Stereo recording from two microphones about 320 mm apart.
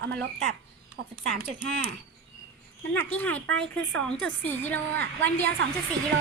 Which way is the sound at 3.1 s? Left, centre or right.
Centre.